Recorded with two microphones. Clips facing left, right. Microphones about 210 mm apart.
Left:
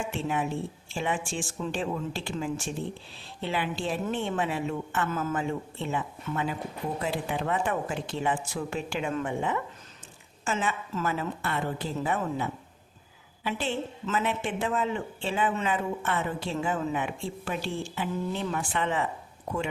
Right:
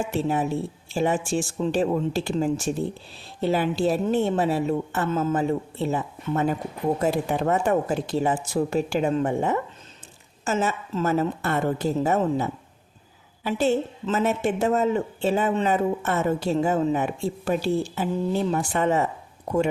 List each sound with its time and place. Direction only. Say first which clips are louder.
0.0 s a woman's voice: right 6 dB; 40° right (ahead or behind)